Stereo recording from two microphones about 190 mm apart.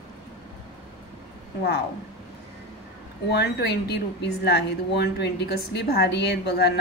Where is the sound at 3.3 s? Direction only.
60° left (ahead or behind).